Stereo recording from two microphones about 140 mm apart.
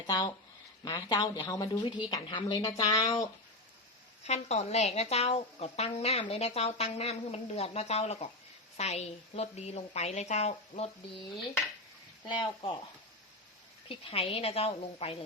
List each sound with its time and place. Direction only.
0.9 s a woman's voice: 30° left (ahead or behind)
4.2 s speech: 50° left (ahead or behind)
12.3 s a woman's voice: 35° left (ahead or behind)
13.8 s speech: 40° left (ahead or behind)